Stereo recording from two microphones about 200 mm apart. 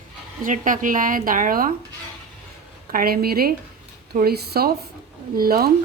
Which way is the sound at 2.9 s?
50° right (ahead or behind).